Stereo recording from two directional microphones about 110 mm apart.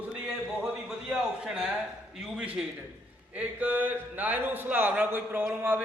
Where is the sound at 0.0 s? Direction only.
5° right (ahead or behind).